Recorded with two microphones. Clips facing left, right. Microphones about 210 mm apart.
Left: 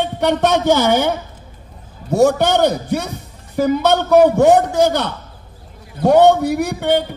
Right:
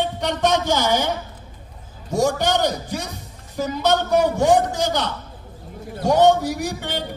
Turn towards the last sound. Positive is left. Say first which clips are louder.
# left 10 dB
turn(degrees=60)  # may be behind; listen again after turning